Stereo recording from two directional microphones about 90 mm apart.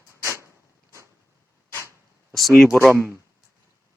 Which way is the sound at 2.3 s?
Centre (ahead or behind).